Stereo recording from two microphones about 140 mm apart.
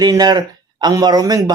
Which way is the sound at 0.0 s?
30° right (ahead or behind).